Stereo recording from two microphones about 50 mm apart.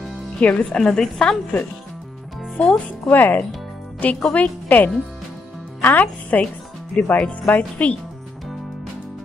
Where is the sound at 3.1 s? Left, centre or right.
Left.